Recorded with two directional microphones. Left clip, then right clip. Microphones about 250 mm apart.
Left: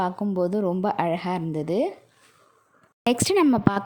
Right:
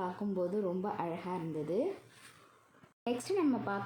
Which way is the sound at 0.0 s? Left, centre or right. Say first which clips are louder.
Left 11 dB; left.